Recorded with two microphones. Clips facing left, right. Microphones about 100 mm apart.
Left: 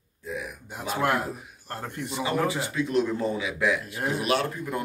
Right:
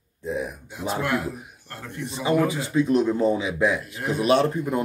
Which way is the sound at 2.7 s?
20° right (ahead or behind).